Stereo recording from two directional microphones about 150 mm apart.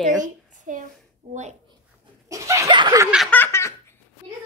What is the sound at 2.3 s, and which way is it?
Speech, 20° right (ahead or behind).